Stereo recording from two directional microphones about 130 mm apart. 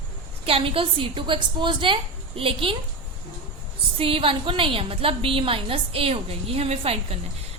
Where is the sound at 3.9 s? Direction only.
45° right (ahead or behind).